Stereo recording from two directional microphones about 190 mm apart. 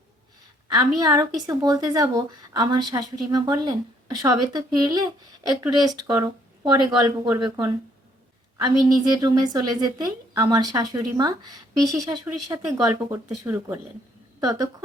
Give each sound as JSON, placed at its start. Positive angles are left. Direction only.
{"t": 0.7, "sound": "a woman's voice", "side_deg": -20}